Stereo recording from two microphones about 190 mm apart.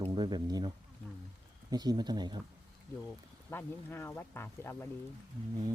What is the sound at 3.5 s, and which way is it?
Speech, 10° left (ahead or behind).